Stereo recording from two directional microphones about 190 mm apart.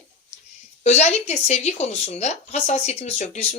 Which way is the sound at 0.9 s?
35° left (ahead or behind).